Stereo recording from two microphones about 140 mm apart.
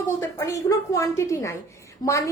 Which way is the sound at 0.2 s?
20° left (ahead or behind).